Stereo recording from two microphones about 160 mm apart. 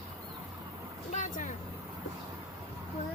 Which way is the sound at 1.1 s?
55° left (ahead or behind).